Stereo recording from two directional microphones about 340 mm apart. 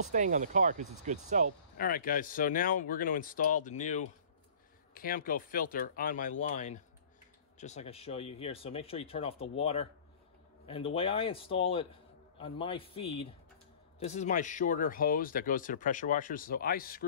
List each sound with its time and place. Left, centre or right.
0.1 s speech: right
1.8 s speech: left
11.0 s speech: centre